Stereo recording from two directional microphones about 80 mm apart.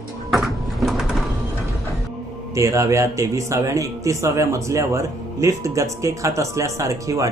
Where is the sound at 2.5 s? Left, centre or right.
Right.